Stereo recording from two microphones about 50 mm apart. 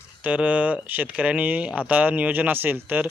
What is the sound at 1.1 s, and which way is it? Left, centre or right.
Speech, right.